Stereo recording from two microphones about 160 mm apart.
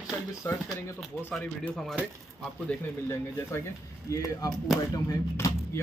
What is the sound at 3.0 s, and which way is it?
Speech, 15° left (ahead or behind).